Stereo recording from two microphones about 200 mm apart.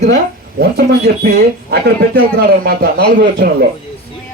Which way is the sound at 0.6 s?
50° right (ahead or behind).